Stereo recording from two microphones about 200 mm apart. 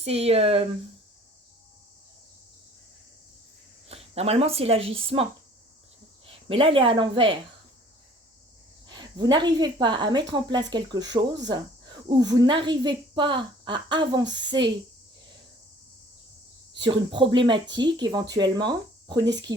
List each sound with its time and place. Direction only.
0.0 s speech: 30° right (ahead or behind)
3.8 s speech: 30° right (ahead or behind)
8.9 s speech: 20° right (ahead or behind)
16.7 s speech: 25° right (ahead or behind)